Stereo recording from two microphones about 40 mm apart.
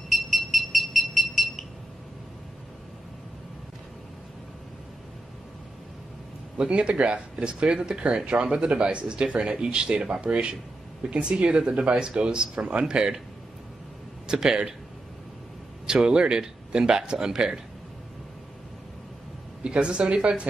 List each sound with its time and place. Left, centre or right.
0.1 s a sound: centre
6.7 s speech: right
8.3 s speech: right
14.2 s speech: centre
15.9 s a man's voice: centre
19.6 s speech: right